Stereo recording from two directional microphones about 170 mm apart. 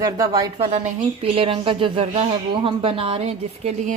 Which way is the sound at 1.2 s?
35° right (ahead or behind).